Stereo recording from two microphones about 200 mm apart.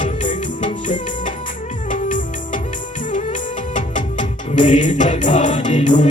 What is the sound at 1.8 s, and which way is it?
Music, 40° left (ahead or behind).